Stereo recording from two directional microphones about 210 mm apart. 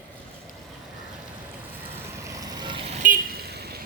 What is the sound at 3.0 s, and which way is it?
Vehicle, 45° right (ahead or behind).